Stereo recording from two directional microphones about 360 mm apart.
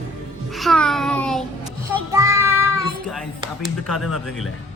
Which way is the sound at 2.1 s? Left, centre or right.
Centre.